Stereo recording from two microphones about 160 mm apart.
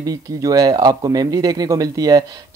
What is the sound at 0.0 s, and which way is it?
Speech, 20° right (ahead or behind).